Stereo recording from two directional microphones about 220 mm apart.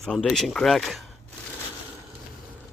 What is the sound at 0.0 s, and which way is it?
Speech, 5° left (ahead or behind).